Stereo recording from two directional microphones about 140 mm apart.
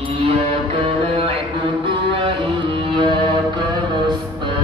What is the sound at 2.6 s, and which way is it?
Music, 35° right (ahead or behind).